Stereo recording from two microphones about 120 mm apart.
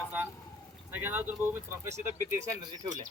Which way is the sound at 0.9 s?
15° right (ahead or behind).